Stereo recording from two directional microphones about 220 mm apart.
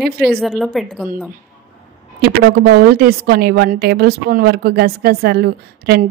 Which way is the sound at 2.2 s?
45° right (ahead or behind).